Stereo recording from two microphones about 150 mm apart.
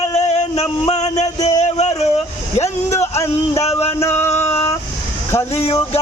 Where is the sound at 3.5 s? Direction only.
45° left (ahead or behind).